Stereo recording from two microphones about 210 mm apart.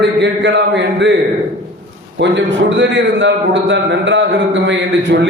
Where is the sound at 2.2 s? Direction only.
60° right (ahead or behind).